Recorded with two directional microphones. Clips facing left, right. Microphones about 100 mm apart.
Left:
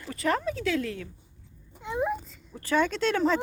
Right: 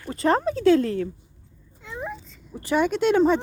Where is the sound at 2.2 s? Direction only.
Centre (ahead or behind).